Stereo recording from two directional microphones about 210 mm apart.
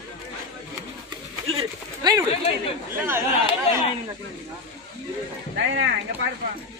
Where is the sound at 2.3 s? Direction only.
30° left (ahead or behind).